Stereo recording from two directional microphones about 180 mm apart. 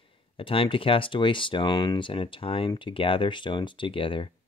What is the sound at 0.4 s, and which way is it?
Speech, 30° left (ahead or behind).